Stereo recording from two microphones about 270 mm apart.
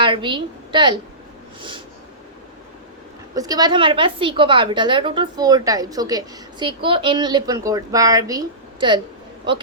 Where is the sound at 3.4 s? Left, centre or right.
Centre.